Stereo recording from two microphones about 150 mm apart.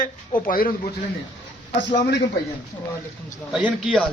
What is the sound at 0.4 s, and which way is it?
Speech, 75° left (ahead or behind).